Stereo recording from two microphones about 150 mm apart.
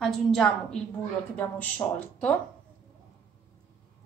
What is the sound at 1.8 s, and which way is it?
Speech, 25° left (ahead or behind).